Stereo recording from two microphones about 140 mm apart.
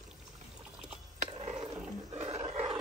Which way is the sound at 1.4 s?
40° right (ahead or behind).